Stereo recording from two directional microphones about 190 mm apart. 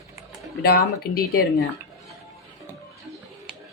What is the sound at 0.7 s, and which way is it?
Speech, 50° left (ahead or behind).